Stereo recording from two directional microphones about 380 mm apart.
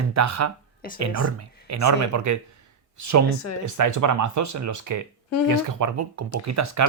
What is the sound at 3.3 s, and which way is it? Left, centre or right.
Speech, left.